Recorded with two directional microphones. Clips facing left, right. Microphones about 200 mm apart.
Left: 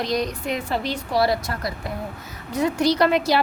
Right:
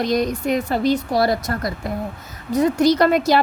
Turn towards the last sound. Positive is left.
turn(degrees=-45)  # may be behind; listen again after turning